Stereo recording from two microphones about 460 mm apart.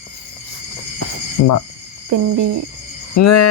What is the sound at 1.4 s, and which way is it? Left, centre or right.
Cricket, left.